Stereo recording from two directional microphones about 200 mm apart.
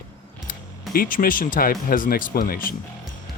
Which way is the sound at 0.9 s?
45° left (ahead or behind).